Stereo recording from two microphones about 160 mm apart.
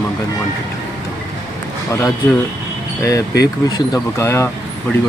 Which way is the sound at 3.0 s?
20° left (ahead or behind).